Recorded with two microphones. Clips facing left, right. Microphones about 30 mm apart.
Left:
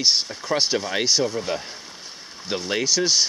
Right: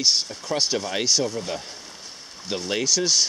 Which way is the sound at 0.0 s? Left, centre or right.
Centre.